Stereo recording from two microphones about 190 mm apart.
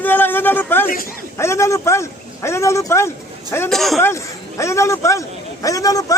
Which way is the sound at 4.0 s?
15° left (ahead or behind).